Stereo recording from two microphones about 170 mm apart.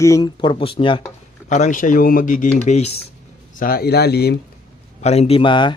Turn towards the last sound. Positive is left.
turn(degrees=30)  # may be behind; listen again after turning